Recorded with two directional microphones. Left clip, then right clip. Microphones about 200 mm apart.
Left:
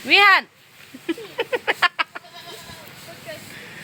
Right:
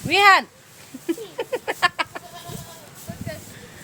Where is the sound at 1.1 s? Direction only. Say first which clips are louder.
Left 2 dB; centre (ahead or behind).